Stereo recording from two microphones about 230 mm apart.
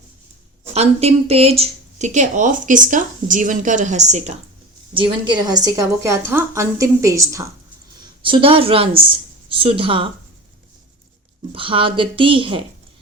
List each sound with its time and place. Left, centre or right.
0.6 s a woman's voice: right
11.5 s a woman's voice: right